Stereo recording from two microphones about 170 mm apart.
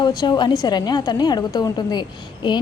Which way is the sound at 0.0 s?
25° left (ahead or behind).